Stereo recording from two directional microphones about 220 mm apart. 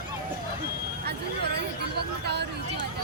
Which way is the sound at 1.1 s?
50° right (ahead or behind).